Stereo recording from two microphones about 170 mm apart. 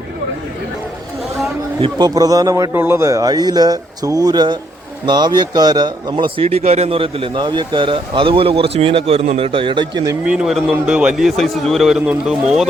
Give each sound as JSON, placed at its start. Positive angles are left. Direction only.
{"t": 1.8, "sound": "a man's voice", "side_deg": -25}
{"t": 10.2, "sound": "a man's voice", "side_deg": -5}